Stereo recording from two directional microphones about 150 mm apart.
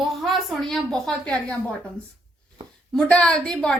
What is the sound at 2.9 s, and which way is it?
Speech, 5° left (ahead or behind).